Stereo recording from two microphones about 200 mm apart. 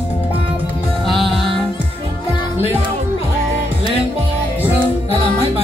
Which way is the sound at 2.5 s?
10° right (ahead or behind).